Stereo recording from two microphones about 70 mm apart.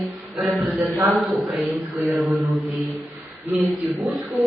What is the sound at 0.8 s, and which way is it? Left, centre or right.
Speech, right.